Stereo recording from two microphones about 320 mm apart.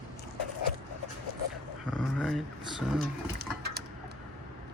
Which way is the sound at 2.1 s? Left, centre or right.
Centre.